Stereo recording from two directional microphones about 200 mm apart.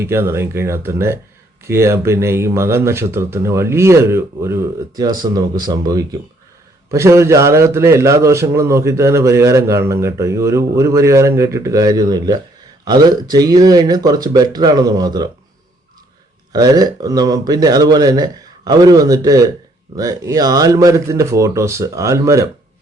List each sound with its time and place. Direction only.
0.0 s a man's voice: 10° right (ahead or behind)
16.5 s a man's voice: 20° right (ahead or behind)